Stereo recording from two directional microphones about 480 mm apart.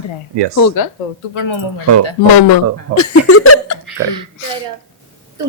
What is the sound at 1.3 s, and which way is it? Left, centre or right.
Speech, left.